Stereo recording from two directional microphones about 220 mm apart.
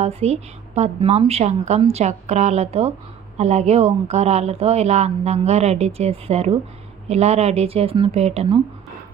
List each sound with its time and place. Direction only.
0.0 s a woman's voice: 30° right (ahead or behind)